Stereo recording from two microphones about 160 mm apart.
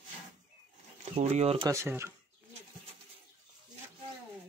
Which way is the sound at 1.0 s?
40° right (ahead or behind).